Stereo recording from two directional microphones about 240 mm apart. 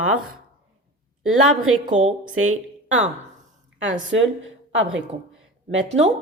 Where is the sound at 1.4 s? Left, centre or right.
Right.